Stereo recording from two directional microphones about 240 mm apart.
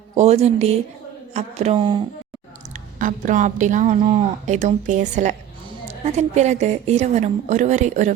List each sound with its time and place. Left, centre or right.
0.1 s a woman's voice: right
3.0 s a woman's voice: right